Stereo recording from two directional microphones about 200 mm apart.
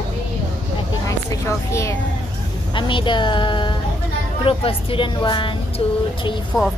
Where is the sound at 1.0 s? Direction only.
15° left (ahead or behind).